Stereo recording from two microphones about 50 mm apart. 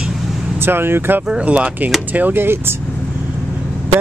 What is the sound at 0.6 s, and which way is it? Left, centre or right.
Speech, right.